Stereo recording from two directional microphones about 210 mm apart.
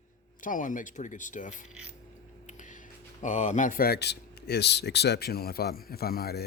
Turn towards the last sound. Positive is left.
turn(degrees=50)  # may be behind; listen again after turning